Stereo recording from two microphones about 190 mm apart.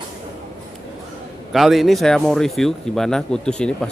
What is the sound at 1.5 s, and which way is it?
A man's voice, centre (ahead or behind).